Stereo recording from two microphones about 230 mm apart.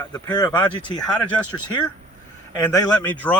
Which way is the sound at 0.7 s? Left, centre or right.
Left.